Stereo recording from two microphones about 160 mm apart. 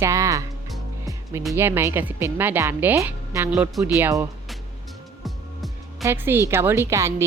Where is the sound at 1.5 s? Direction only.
15° right (ahead or behind).